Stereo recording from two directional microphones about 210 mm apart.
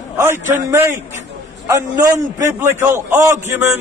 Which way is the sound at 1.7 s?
15° right (ahead or behind).